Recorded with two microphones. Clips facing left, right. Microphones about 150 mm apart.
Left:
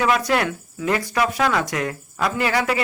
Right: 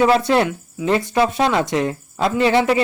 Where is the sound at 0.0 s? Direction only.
25° right (ahead or behind).